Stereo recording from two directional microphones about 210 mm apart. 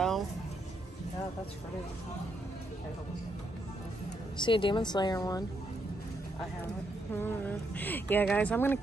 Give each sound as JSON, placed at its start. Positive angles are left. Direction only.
{"t": 4.4, "sound": "a woman's voice", "side_deg": 25}
{"t": 7.2, "sound": "speech", "side_deg": 10}